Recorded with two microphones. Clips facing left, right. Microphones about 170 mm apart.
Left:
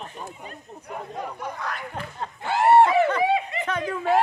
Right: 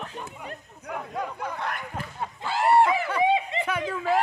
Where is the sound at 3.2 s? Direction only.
20° right (ahead or behind).